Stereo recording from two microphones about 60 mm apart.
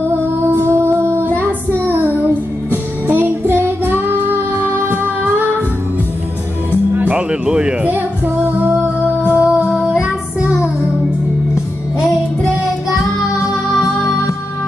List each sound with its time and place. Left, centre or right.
0.6 s music: right
6.7 s music: right
7.2 s music: centre
9.3 s music: right